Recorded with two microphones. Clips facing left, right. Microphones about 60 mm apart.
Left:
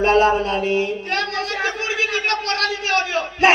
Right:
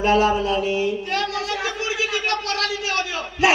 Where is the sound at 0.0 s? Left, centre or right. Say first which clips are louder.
Left 2 dB; left.